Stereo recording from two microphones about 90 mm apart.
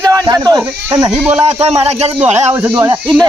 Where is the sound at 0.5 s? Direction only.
65° right (ahead or behind).